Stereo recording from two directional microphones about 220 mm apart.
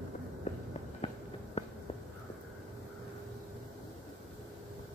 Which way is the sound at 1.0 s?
30° left (ahead or behind).